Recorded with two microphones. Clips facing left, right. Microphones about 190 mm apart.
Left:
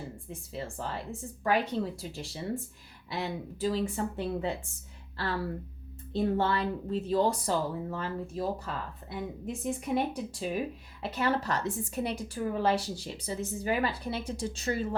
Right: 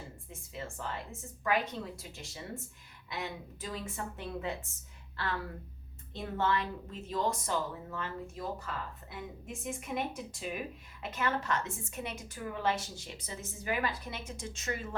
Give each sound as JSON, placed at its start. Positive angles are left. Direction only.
{"t": 0.5, "sound": "speech", "side_deg": 35}